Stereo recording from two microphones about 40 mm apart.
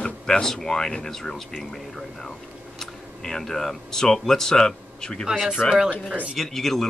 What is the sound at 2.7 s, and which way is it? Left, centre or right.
Speech, centre.